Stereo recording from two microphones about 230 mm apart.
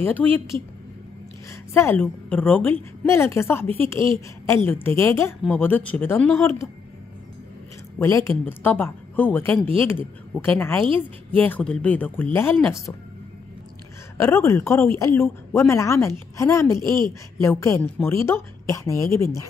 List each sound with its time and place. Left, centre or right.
0.0 s a woman's voice: centre
1.7 s a woman's voice: centre
3.6 s a woman's voice: right
3.9 s a woman's voice: centre
8.0 s a woman's voice: centre
14.1 s a woman's voice: centre